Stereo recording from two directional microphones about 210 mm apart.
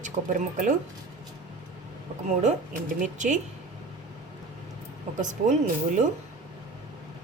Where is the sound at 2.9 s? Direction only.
35° right (ahead or behind).